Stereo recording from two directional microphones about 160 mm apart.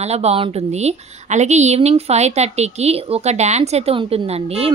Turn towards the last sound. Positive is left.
turn(degrees=-40)  # may be behind; listen again after turning